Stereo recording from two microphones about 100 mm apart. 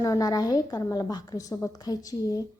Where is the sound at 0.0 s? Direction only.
40° left (ahead or behind).